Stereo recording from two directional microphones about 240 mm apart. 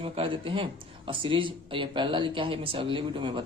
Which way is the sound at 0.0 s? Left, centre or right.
Right.